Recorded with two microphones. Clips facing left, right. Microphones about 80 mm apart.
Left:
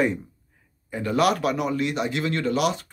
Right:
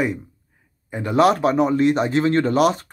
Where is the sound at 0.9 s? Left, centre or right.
Right.